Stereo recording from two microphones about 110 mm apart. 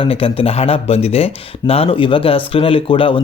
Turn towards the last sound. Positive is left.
turn(degrees=50)  # may be behind; listen again after turning